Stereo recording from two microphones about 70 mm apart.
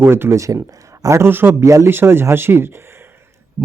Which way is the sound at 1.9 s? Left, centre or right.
Right.